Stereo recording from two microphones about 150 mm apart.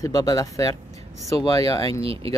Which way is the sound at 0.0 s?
25° left (ahead or behind).